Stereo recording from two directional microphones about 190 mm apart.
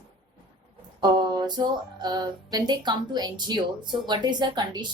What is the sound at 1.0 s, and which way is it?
Music, 20° right (ahead or behind).